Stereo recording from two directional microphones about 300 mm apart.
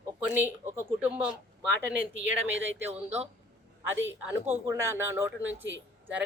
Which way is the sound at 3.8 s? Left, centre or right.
Centre.